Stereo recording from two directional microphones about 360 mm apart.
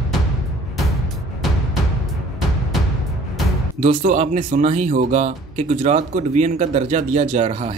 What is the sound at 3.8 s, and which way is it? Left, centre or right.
Speech, right.